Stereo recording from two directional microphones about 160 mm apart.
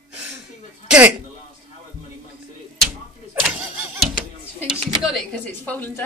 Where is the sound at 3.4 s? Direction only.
Centre (ahead or behind).